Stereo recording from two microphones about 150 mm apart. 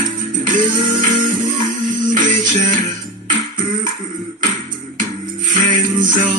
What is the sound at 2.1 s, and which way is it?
Music, 60° right (ahead or behind).